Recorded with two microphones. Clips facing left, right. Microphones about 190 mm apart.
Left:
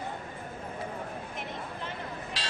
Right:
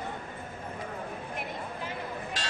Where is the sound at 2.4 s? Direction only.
45° right (ahead or behind).